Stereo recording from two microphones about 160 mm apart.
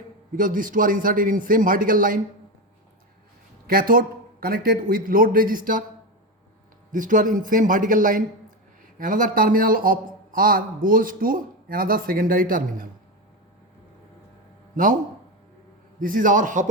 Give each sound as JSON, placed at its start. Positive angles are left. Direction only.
{"t": 0.3, "sound": "a man's voice", "side_deg": -60}
{"t": 3.7, "sound": "a man's voice", "side_deg": -65}
{"t": 6.9, "sound": "a man's voice", "side_deg": -55}
{"t": 16.0, "sound": "a man's voice", "side_deg": -60}